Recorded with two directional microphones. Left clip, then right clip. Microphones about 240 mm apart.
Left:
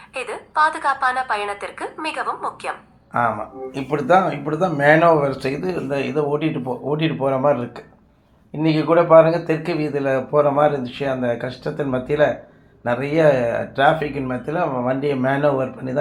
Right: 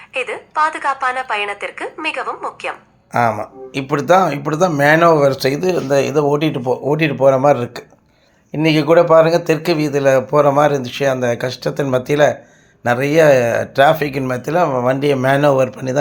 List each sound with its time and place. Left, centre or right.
0.1 s a woman's voice: centre
3.1 s speech: right